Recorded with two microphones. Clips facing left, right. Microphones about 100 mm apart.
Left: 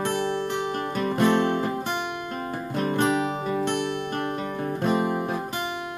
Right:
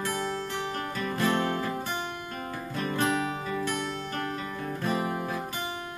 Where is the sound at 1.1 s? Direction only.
25° left (ahead or behind).